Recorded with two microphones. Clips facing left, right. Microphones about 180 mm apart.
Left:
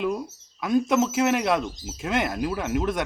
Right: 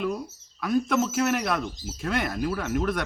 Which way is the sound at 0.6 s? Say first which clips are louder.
Left 2 dB; 20° left (ahead or behind).